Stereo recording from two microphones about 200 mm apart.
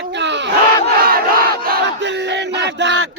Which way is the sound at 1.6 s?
55° right (ahead or behind).